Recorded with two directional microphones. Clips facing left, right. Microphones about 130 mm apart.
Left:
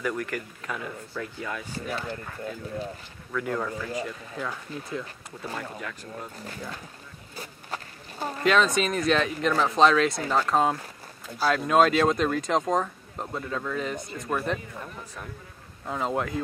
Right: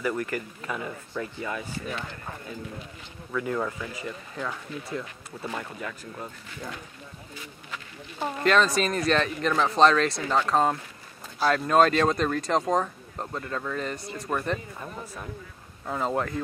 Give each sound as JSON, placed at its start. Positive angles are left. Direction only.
{"t": 0.0, "sound": "speech", "side_deg": -5}
{"t": 3.3, "sound": "speech", "side_deg": -5}
{"t": 7.3, "sound": "insect", "side_deg": 40}
{"t": 8.5, "sound": "speech", "side_deg": 0}
{"t": 15.9, "sound": "speech", "side_deg": 0}